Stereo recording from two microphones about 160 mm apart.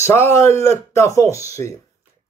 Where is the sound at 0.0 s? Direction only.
15° left (ahead or behind).